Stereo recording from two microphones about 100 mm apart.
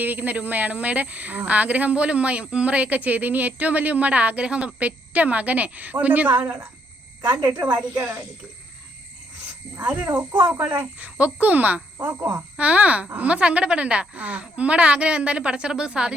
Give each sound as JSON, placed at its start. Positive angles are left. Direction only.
{"t": 0.0, "sound": "speech", "side_deg": -15}
{"t": 7.4, "sound": "speech", "side_deg": -45}
{"t": 9.7, "sound": "speech", "side_deg": -15}